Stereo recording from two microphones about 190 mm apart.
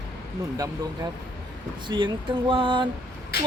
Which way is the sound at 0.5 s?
20° right (ahead or behind).